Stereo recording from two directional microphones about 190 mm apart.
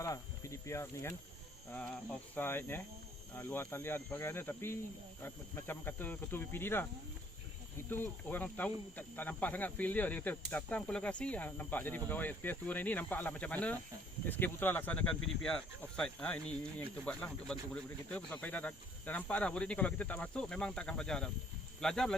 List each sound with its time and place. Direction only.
0.0 s a sound: 15° left (ahead or behind)
2.3 s speech: 10° left (ahead or behind)
7.9 s speech: 10° left (ahead or behind)